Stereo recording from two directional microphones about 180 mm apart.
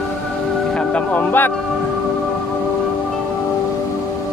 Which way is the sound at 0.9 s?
10° left (ahead or behind).